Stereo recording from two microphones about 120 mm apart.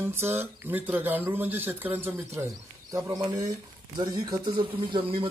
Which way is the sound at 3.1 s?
35° right (ahead or behind).